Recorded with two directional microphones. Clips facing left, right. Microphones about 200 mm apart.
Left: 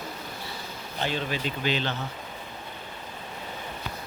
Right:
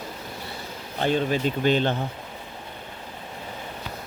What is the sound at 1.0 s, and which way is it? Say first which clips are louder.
Speech: right 7 dB; 45° right (ahead or behind).